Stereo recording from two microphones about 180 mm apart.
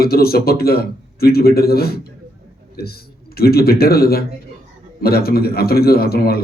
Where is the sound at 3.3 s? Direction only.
60° left (ahead or behind).